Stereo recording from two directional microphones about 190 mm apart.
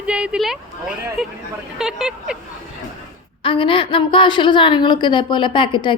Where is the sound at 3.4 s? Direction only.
25° left (ahead or behind).